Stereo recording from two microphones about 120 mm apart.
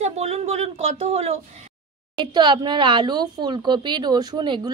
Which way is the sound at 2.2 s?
40° right (ahead or behind).